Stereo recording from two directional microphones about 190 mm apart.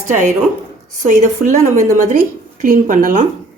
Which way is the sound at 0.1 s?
40° right (ahead or behind).